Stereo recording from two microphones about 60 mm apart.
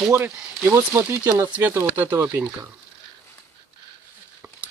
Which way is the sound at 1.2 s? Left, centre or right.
Right.